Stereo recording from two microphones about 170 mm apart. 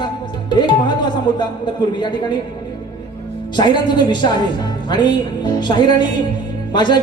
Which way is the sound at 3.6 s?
25° left (ahead or behind).